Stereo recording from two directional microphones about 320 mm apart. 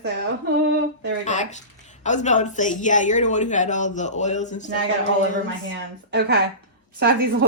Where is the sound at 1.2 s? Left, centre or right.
Left.